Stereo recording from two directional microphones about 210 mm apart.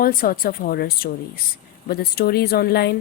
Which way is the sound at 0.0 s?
45° left (ahead or behind).